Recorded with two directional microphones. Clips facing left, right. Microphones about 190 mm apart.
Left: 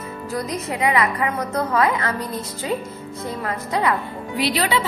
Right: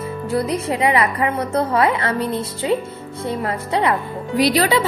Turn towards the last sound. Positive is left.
turn(degrees=-40)  # may be behind; listen again after turning